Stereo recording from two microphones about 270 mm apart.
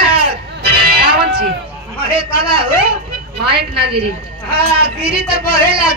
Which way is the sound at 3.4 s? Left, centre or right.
Right.